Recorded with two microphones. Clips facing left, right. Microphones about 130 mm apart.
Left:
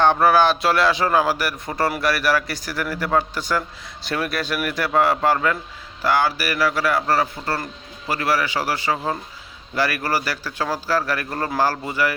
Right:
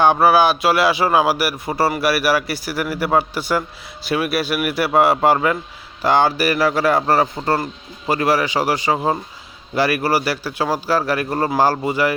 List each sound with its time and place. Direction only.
0.0 s a man's voice: 5° right (ahead or behind)